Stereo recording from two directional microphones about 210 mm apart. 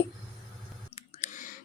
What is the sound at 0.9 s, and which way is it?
Clicking, 35° left (ahead or behind).